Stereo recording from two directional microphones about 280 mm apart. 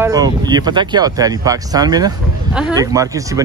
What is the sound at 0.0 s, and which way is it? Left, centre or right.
Speech, centre.